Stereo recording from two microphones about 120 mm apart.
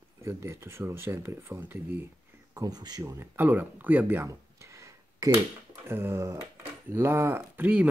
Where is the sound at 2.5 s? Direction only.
30° right (ahead or behind); by 4.3 s 15° right (ahead or behind).